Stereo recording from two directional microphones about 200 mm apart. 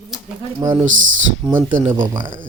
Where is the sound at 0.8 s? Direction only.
75° right (ahead or behind).